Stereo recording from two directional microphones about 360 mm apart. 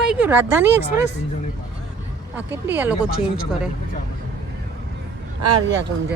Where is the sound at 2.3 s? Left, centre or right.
Centre.